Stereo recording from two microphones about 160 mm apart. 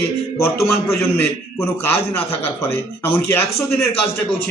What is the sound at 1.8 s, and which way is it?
A man's voice, 15° left (ahead or behind).